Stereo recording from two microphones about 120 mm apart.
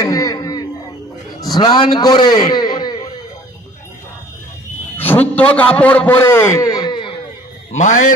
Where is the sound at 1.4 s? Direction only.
35° left (ahead or behind).